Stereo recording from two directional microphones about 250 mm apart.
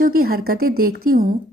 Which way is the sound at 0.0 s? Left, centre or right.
Right.